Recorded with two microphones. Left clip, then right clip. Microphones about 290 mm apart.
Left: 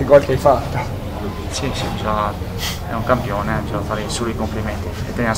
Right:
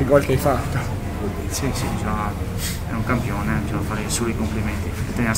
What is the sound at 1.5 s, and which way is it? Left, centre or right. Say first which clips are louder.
Speech: left 5 dB; centre.